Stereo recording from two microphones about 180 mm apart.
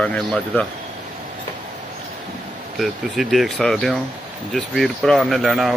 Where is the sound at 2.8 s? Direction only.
Centre (ahead or behind).